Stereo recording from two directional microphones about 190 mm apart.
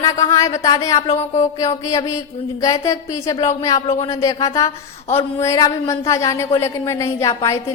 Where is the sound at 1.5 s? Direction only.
15° left (ahead or behind).